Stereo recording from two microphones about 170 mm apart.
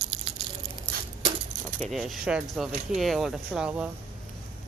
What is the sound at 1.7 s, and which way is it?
Speech, centre (ahead or behind).